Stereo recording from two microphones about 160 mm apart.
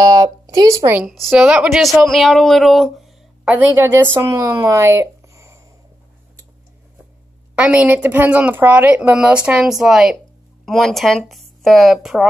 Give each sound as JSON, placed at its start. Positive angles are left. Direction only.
{"t": 0.0, "sound": "speech", "side_deg": -20}
{"t": 1.0, "sound": "speech", "side_deg": 0}
{"t": 7.5, "sound": "a woman's voice", "side_deg": -10}